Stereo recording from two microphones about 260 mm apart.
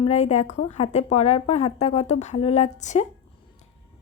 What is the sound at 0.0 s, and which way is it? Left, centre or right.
Speech, left.